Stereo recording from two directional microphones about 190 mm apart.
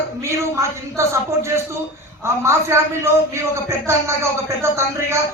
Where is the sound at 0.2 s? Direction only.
15° right (ahead or behind).